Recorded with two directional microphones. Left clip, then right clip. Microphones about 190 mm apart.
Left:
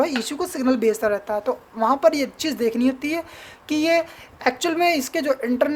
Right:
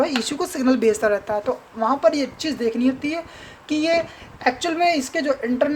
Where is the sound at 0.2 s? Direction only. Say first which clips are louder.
Right 2 dB; 5° left (ahead or behind).